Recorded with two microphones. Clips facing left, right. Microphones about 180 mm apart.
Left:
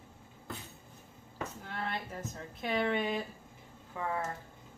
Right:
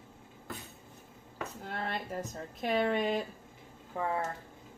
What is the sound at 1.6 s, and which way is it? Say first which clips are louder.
Speech: right 3 dB; 40° right (ahead or behind).